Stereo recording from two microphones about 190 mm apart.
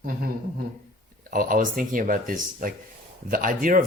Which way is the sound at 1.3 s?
45° right (ahead or behind).